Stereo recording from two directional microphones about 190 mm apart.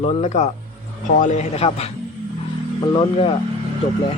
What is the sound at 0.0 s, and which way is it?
Speech, 35° left (ahead or behind).